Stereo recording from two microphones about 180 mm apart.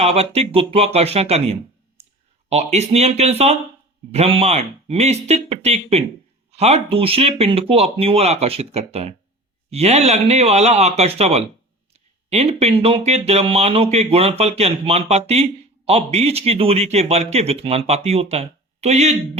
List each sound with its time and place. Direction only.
0.0 s speech: 35° right (ahead or behind)